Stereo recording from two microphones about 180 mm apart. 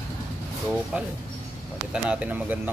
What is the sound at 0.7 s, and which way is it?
Speech, 5° right (ahead or behind).